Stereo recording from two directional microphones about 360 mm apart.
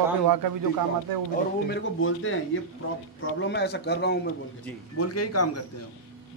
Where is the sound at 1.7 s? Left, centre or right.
Left.